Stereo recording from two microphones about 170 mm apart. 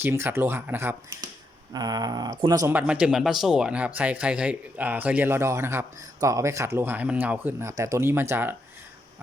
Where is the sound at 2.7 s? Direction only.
10° right (ahead or behind).